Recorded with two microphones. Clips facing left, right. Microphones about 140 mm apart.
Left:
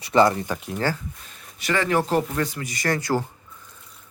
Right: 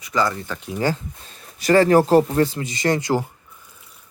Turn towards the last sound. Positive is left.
turn(degrees=-20)  # may be behind; listen again after turning